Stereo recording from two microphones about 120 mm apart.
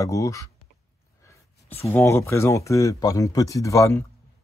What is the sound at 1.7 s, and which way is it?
Speech, 20° left (ahead or behind).